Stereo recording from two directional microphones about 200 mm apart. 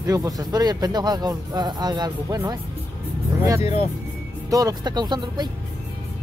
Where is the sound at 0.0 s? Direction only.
15° right (ahead or behind).